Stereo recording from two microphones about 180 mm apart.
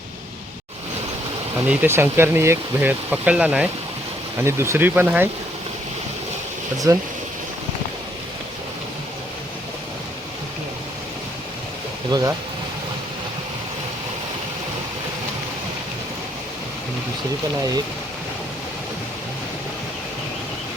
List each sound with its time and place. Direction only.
1.6 s speech: 10° right (ahead or behind)
6.9 s speech: 20° right (ahead or behind)
12.1 s speech: 25° right (ahead or behind)